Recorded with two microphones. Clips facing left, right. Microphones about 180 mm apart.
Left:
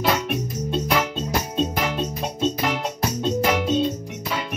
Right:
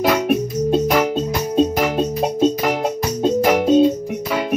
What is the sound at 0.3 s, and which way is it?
Music, 45° right (ahead or behind).